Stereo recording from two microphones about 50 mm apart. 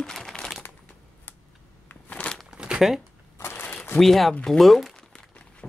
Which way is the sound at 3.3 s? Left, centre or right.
Left.